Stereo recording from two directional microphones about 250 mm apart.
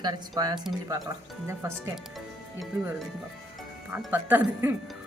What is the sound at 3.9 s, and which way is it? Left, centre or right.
A woman's voice, centre.